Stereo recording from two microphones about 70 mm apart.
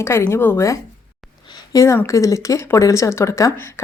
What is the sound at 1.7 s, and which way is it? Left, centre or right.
A woman's voice, left.